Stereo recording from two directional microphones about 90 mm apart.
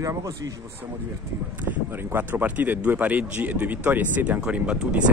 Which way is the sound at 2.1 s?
20° right (ahead or behind).